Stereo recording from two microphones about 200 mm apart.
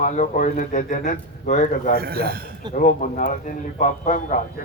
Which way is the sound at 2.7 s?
40° left (ahead or behind).